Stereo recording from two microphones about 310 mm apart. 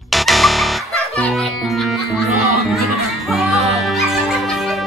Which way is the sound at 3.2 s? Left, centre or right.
Centre.